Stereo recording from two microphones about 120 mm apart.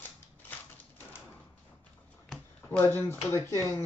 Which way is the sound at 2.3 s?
15° left (ahead or behind).